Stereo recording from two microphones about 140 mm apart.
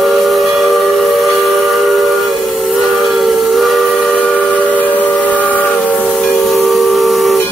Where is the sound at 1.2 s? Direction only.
Centre (ahead or behind).